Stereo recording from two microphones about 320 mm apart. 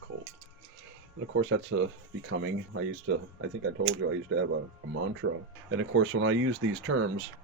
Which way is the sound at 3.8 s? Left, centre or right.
Right.